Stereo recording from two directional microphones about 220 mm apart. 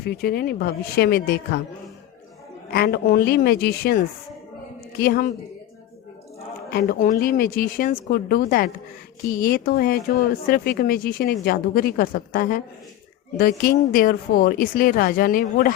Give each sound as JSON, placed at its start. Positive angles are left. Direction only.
{"t": 0.0, "sound": "speech", "side_deg": 45}
{"t": 2.7, "sound": "speech", "side_deg": 45}
{"t": 6.7, "sound": "speech", "side_deg": 40}